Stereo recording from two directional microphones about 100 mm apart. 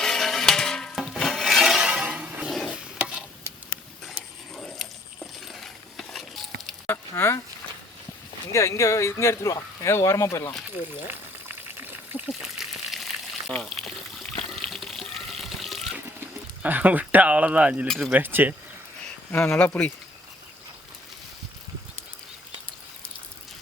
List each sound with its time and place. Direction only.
0.0 s a sound: 5° left (ahead or behind); by 2.5 s 10° right (ahead or behind)
2.6 s stir: 10° right (ahead or behind)
4.5 s a sound: centre (ahead or behind)
7.2 s speech: 25° left (ahead or behind)
8.5 s speech: 30° left (ahead or behind)
11.1 s water: 20° right (ahead or behind)
12.3 s water: centre (ahead or behind)
16.6 s speech: 15° right (ahead or behind)
17.8 s speech: centre (ahead or behind)
18.1 s speech: 20° right (ahead or behind)
19.3 s speech: 15° left (ahead or behind)